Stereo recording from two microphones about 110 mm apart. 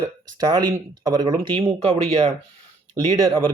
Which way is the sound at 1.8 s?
70° right (ahead or behind).